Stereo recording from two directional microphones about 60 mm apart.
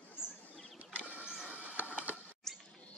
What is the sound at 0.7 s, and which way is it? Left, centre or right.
Vehicle, right.